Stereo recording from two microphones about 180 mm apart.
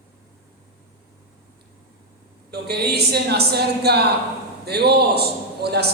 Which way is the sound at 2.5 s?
65° right (ahead or behind).